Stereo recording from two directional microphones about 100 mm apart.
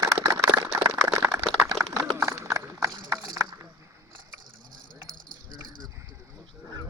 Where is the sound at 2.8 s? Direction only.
40° right (ahead or behind).